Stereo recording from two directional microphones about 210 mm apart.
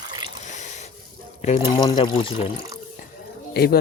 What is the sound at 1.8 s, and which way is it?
Speech, 20° left (ahead or behind).